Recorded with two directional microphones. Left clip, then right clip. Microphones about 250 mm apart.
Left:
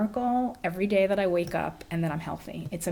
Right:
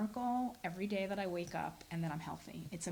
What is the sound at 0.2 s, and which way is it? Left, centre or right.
Speech, centre.